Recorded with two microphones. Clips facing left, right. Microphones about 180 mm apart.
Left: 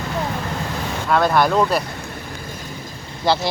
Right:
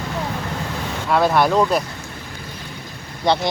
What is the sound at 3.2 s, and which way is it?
Speech, 5° left (ahead or behind).